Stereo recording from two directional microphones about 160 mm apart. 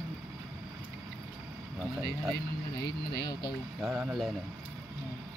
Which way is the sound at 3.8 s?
5° right (ahead or behind).